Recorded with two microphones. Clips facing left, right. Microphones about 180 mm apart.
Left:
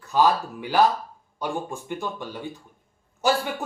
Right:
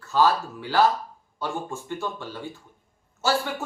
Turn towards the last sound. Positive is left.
turn(degrees=15)  # may be behind; listen again after turning